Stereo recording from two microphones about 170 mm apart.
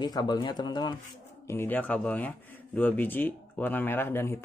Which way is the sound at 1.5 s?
10° left (ahead or behind).